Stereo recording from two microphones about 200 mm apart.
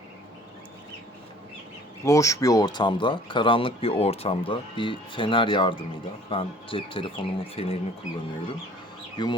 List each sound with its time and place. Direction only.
2.0 s speech: 15° left (ahead or behind)
9.2 s speech: 20° left (ahead or behind)